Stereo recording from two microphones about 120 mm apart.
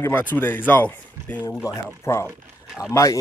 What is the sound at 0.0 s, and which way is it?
Speech, 15° left (ahead or behind).